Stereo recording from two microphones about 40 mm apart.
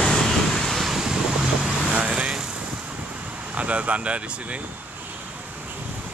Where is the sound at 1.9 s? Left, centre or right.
Right.